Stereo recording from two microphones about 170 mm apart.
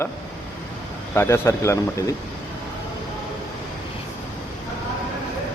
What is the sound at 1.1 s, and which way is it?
Speech, 15° left (ahead or behind).